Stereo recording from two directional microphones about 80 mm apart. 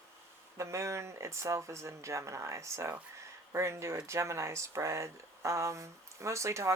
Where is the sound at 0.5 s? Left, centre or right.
Right.